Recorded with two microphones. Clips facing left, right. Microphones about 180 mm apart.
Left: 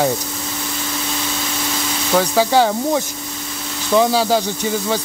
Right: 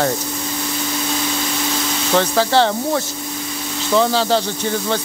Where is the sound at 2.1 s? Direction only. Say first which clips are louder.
Left 1 dB; 10° left (ahead or behind).